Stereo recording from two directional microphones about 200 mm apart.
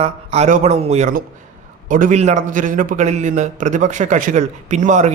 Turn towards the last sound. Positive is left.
turn(degrees=-40)  # may be behind; listen again after turning